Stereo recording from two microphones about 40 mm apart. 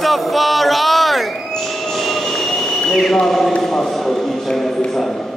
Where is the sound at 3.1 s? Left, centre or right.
Centre.